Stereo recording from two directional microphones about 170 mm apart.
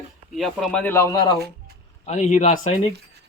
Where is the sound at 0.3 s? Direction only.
Centre (ahead or behind); by 1.4 s 25° left (ahead or behind).